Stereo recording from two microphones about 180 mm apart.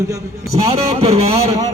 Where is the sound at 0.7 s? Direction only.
35° right (ahead or behind).